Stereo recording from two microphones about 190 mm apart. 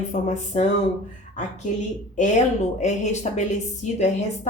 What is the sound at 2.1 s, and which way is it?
Speech, 40° left (ahead or behind).